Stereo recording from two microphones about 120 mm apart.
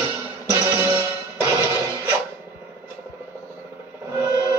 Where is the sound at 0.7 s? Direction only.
20° right (ahead or behind).